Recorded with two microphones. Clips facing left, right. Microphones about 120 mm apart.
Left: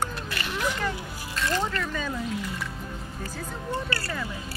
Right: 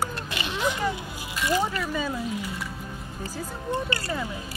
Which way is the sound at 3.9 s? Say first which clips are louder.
Right 2 dB; 20° right (ahead or behind).